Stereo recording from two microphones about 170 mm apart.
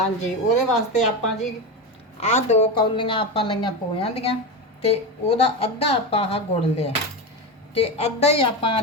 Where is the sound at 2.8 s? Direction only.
30° left (ahead or behind).